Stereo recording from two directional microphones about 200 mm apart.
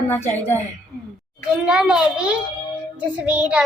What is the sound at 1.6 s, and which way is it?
Child singing, 5° right (ahead or behind).